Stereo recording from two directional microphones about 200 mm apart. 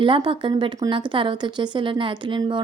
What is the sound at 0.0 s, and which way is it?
A woman's voice, 25° right (ahead or behind).